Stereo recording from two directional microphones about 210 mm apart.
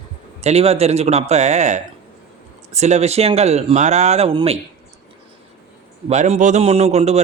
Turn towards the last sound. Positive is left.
turn(degrees=-30)  # may be behind; listen again after turning